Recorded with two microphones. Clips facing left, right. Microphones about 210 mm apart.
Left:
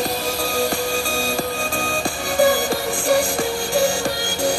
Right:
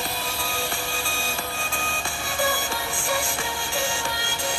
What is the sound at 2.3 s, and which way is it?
Music, 40° left (ahead or behind).